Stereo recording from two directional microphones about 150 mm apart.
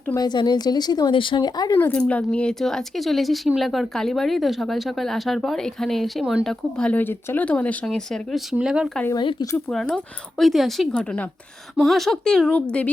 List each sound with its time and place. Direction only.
0.1 s speech: 30° left (ahead or behind)
1.7 s speech: 10° left (ahead or behind); by 8.9 s 5° right (ahead or behind)
9.1 s speech: 25° left (ahead or behind)
9.6 s speech: 5° left (ahead or behind)